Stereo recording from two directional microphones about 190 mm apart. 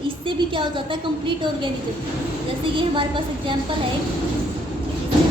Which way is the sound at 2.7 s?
25° right (ahead or behind).